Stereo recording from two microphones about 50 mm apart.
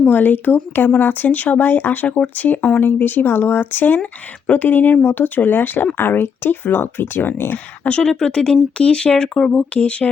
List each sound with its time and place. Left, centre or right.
0.0 s speech: left
2.8 s speech: left
7.5 s speech: left
8.0 s speech: centre
9.5 s speech: left